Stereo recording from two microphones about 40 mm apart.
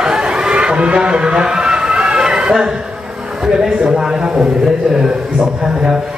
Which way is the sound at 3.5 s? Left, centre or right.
Centre.